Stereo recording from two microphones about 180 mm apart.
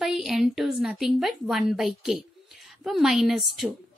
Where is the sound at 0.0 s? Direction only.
Centre (ahead or behind).